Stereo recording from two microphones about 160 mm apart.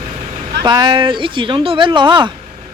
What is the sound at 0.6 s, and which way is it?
Speech, 25° right (ahead or behind).